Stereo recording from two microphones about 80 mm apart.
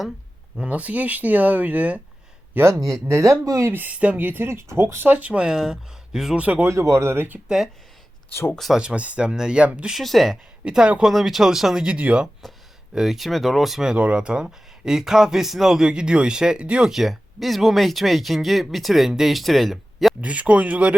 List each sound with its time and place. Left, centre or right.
0.6 s speech: centre
2.6 s speech: right
3.7 s speech: right
6.4 s speech: right
6.7 s speech: right
7.4 s speech: centre
8.3 s speech: left
8.5 s speech: centre
8.8 s speech: centre
9.9 s speech: centre
10.7 s speech: centre
20.2 s speech: centre